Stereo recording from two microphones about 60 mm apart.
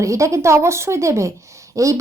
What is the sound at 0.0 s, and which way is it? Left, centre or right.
A woman's voice, right.